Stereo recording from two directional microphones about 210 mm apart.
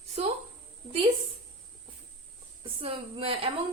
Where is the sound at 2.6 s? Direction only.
25° right (ahead or behind).